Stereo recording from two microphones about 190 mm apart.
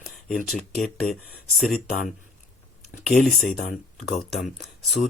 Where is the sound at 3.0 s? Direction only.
Centre (ahead or behind).